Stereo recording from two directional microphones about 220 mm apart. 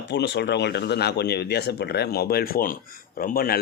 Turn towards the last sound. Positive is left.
turn(degrees=40)  # may be behind; listen again after turning